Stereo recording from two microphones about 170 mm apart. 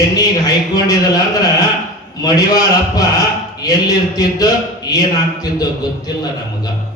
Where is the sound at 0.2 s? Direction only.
25° left (ahead or behind).